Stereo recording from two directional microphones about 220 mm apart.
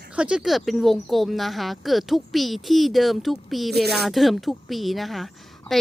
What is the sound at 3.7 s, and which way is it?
Speech, 45° right (ahead or behind).